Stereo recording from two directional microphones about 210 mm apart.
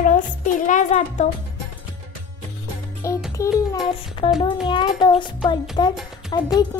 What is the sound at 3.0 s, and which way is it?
Music, 15° left (ahead or behind).